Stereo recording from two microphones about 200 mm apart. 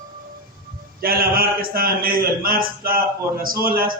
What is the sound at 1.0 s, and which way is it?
A man's voice, 45° right (ahead or behind).